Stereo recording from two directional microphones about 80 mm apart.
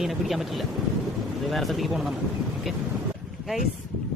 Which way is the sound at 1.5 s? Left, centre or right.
Centre.